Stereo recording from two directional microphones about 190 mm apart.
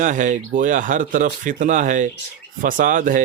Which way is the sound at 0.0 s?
40° right (ahead or behind).